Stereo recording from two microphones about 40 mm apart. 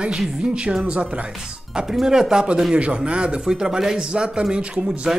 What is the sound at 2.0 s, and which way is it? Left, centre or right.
Speech, centre.